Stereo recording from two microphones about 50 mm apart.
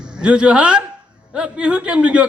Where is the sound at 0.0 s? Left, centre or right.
Centre.